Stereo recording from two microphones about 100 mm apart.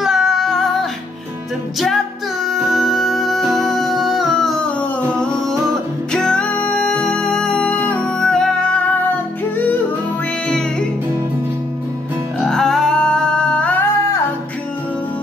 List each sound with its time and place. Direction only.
0.0 s female singing: 5° right (ahead or behind)
2.4 s music: centre (ahead or behind)
6.1 s music: 5° left (ahead or behind)
12.4 s music: 5° left (ahead or behind)